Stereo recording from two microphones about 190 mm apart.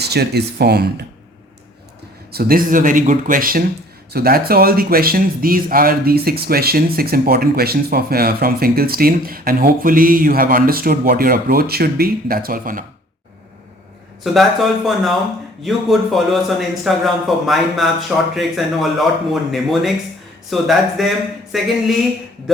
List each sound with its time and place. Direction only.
0.0 s speech: 60° right (ahead or behind)
2.3 s speech: 50° right (ahead or behind)
14.3 s speech: centre (ahead or behind)